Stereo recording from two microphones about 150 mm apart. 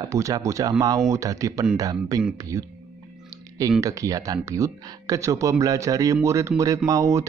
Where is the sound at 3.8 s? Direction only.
20° right (ahead or behind).